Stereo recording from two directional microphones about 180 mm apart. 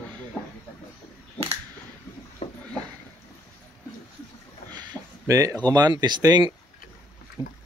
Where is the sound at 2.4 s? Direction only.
30° left (ahead or behind).